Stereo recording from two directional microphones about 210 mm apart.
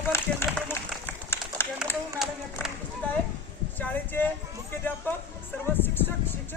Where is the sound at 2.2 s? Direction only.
Centre (ahead or behind).